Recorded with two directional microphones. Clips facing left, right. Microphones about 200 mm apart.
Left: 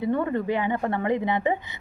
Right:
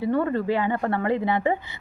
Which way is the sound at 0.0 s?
20° left (ahead or behind).